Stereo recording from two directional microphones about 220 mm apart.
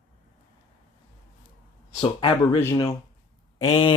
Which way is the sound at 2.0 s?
20° left (ahead or behind).